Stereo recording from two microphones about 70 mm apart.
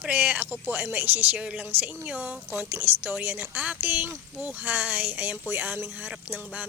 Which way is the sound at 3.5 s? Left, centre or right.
Centre.